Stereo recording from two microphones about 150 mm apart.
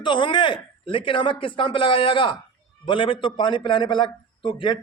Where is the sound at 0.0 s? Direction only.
30° left (ahead or behind).